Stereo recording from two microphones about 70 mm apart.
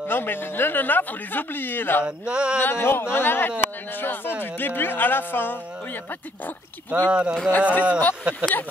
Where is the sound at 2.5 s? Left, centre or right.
Left.